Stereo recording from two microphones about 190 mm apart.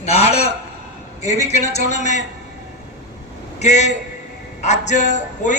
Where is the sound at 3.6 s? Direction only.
35° left (ahead or behind).